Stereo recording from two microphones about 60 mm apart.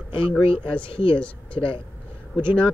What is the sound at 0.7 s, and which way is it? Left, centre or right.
Speech, centre.